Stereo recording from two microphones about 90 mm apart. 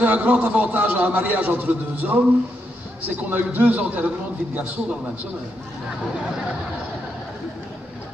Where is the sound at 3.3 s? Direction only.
20° right (ahead or behind).